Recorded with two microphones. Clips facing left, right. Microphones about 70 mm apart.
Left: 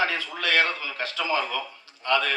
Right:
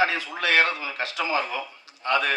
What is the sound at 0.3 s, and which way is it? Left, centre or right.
A man's voice, right.